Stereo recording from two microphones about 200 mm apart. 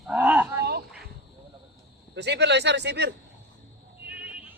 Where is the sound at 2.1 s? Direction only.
60° right (ahead or behind).